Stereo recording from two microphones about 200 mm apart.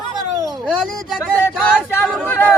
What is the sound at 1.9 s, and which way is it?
Speech, 10° left (ahead or behind).